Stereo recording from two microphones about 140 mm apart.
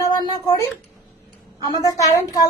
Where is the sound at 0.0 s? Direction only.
30° left (ahead or behind).